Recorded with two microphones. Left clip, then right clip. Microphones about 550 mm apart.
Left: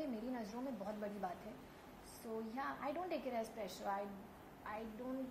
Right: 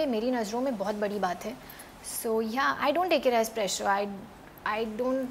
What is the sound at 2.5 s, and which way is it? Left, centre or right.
A woman's voice, right.